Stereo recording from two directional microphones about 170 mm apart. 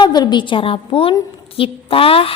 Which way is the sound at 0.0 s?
25° left (ahead or behind).